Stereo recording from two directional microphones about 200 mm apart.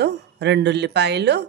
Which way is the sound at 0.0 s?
60° right (ahead or behind).